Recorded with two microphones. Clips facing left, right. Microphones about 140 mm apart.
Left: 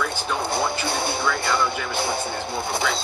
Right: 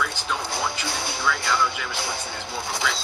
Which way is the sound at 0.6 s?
60° left (ahead or behind).